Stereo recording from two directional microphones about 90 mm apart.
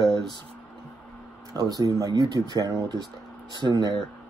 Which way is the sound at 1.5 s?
45° right (ahead or behind).